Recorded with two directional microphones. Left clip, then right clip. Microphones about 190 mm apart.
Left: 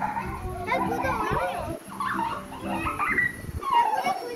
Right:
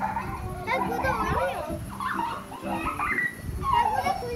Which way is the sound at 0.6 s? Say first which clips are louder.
Even; 55° right (ahead or behind).